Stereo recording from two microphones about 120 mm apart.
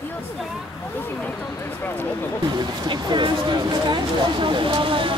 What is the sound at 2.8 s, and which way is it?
Speech, 40° right (ahead or behind).